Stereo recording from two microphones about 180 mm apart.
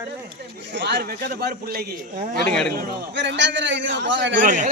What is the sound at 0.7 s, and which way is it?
Speech, 70° right (ahead or behind).